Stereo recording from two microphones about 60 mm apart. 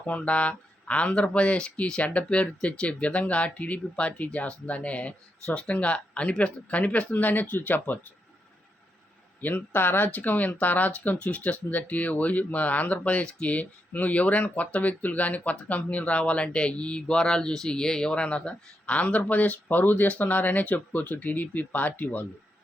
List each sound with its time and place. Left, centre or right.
0.0 s speech: left
9.4 s speech: left